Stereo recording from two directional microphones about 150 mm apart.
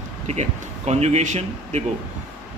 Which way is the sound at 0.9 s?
45° right (ahead or behind).